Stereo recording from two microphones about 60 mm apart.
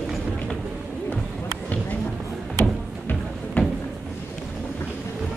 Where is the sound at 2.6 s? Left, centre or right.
Left.